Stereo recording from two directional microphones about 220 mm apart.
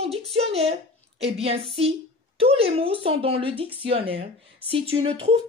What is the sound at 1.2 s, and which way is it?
Speech, 25° right (ahead or behind).